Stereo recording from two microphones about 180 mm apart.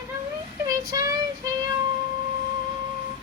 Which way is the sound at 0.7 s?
20° right (ahead or behind).